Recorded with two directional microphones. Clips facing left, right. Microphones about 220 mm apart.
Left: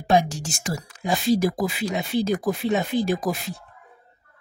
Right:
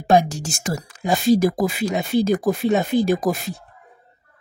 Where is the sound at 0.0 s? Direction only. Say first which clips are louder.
Right 3 dB; 45° right (ahead or behind).